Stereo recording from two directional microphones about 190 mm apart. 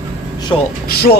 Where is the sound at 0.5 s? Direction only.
20° left (ahead or behind).